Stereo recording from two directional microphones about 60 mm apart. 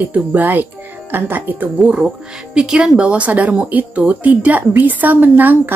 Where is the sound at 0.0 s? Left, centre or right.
Right.